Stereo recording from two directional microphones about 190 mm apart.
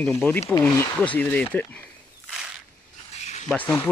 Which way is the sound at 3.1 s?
35° left (ahead or behind).